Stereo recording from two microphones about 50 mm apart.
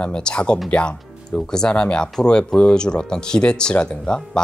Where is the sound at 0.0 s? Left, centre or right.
Centre.